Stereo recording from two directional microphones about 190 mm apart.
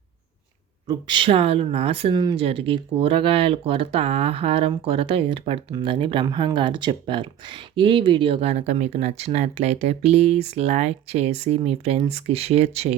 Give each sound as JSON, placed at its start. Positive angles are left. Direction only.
{"t": 0.9, "sound": "speech", "side_deg": -25}